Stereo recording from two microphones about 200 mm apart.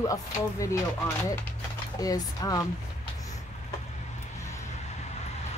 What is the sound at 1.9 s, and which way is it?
Speech, 20° left (ahead or behind).